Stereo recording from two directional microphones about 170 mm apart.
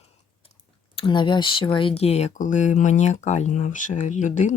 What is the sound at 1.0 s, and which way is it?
Speech, 30° left (ahead or behind).